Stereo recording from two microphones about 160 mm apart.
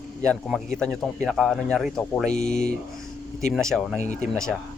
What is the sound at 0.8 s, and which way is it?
Speech, centre (ahead or behind).